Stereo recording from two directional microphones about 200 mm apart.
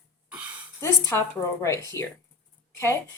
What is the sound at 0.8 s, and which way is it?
A woman's voice, 15° left (ahead or behind).